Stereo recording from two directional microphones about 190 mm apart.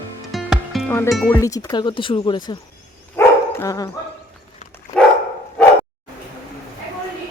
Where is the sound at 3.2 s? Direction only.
15° left (ahead or behind).